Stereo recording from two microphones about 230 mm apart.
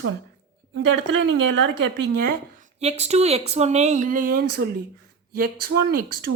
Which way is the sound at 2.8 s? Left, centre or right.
Right.